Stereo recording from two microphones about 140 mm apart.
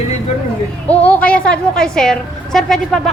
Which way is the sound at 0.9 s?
10° left (ahead or behind).